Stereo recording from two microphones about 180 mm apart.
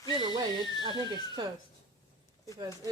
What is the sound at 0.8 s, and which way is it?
Speech, 25° right (ahead or behind).